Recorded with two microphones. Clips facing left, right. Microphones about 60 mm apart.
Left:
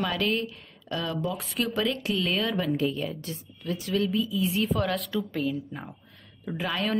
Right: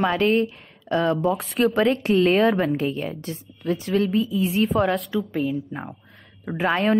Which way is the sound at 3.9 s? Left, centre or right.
Right.